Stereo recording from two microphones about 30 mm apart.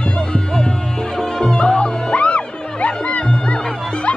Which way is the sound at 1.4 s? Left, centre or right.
Left.